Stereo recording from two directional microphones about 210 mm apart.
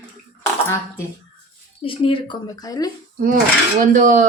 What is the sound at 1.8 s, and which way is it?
Speech, 25° left (ahead or behind).